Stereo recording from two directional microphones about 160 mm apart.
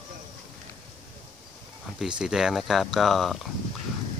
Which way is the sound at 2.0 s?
5° right (ahead or behind).